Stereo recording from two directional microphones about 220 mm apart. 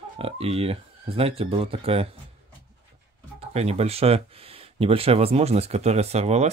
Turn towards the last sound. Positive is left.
turn(degrees=-30)  # may be behind; listen again after turning